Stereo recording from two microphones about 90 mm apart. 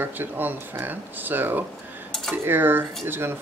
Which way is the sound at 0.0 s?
20° right (ahead or behind).